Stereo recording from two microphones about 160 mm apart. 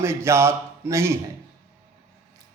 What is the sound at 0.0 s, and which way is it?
Speech, 15° right (ahead or behind).